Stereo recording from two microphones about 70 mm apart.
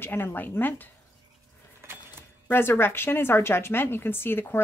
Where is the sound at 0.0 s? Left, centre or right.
Left.